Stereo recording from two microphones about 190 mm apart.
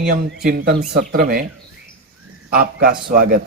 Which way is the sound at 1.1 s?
55° right (ahead or behind).